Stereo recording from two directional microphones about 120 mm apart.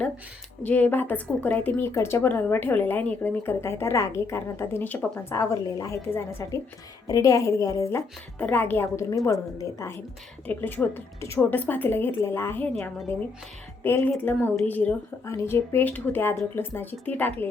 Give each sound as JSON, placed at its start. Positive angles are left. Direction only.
{"t": 0.6, "sound": "a woman's voice", "side_deg": 10}
{"t": 5.3, "sound": "a woman's voice", "side_deg": 25}
{"t": 10.4, "sound": "a woman's voice", "side_deg": 15}
{"t": 13.8, "sound": "a woman's voice", "side_deg": 20}
{"t": 15.2, "sound": "a woman's voice", "side_deg": 25}